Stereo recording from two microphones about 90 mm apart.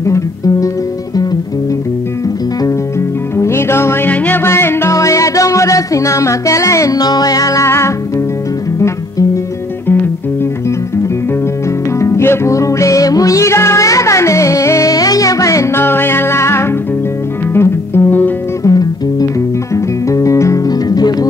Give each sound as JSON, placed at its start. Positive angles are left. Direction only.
{"t": 0.0, "sound": "guitar", "side_deg": 35}
{"t": 3.3, "sound": "music", "side_deg": 30}
{"t": 12.0, "sound": "music", "side_deg": 30}
{"t": 18.6, "sound": "music", "side_deg": 45}